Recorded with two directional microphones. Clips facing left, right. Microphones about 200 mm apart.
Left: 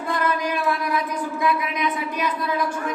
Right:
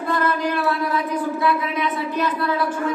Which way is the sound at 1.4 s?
15° left (ahead or behind).